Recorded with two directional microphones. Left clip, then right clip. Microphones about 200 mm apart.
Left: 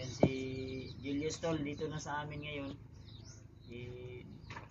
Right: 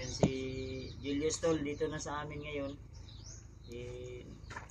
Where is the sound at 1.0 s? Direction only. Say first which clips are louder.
Right 5 dB; 5° right (ahead or behind).